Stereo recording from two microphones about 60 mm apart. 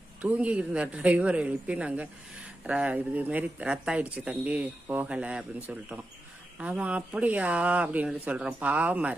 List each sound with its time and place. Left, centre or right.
0.2 s speech: right